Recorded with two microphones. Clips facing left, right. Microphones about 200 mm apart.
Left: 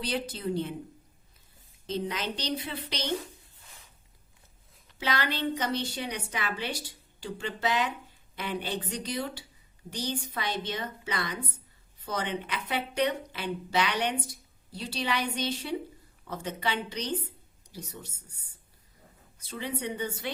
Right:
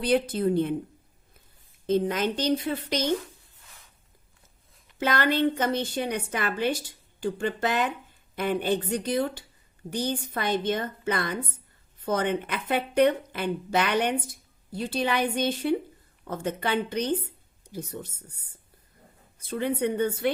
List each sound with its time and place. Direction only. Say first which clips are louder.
0.0 s a woman's voice: right 9 dB; 55° right (ahead or behind)
1.9 s a woman's voice: right 8 dB; 50° right (ahead or behind)
4.9 s a woman's voice: right 7 dB; 50° right (ahead or behind)
19.4 s a woman's voice: right 8 dB; 55° right (ahead or behind)